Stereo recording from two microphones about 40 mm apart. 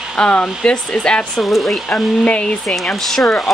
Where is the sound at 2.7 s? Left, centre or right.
Centre.